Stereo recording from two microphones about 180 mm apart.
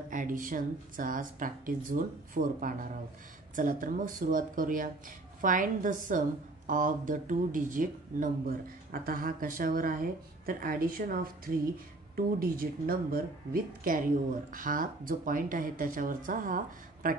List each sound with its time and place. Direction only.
0.1 s speech: 45° right (ahead or behind)